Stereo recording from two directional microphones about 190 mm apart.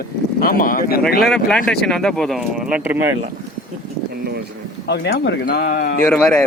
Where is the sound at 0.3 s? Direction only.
50° left (ahead or behind).